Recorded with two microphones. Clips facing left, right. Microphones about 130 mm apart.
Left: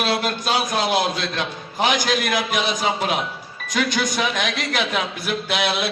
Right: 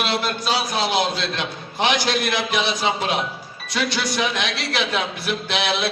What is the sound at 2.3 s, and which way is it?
Speech, 45° left (ahead or behind).